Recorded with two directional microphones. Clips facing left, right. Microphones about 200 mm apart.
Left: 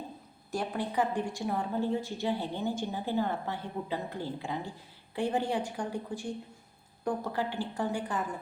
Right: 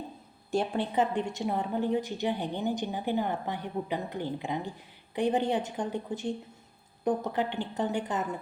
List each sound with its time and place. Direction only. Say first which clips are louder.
0.5 s a woman's voice: right 3 dB; 25° right (ahead or behind)